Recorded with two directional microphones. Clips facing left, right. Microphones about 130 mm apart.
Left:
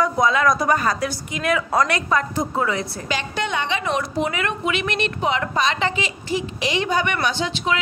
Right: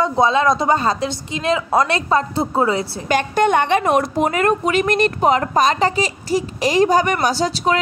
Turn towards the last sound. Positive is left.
turn(degrees=-40)  # may be behind; listen again after turning